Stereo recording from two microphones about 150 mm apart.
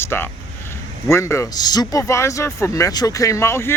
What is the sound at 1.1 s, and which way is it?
Speech, 20° left (ahead or behind).